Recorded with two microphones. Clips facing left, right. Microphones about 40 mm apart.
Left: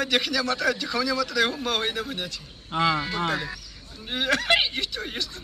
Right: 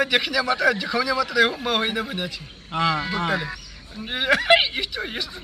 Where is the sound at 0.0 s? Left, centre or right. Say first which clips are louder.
Right 3 dB; centre.